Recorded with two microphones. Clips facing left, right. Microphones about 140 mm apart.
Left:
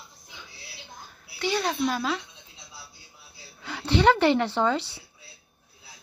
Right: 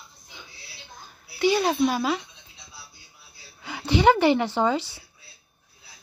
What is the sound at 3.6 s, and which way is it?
A woman's voice, 5° right (ahead or behind).